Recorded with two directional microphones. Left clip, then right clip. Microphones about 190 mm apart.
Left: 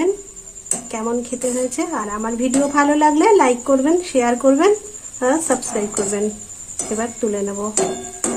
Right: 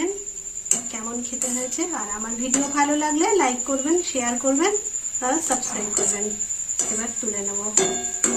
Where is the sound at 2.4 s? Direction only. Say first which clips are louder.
Left 5 dB; 50° left (ahead or behind).